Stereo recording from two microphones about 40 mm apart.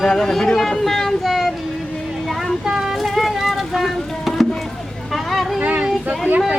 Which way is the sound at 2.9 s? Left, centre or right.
Centre.